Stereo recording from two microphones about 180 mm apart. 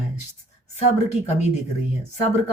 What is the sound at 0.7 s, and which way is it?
Speech, 40° left (ahead or behind).